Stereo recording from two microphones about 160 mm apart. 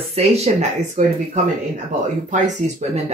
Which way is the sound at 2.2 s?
50° right (ahead or behind).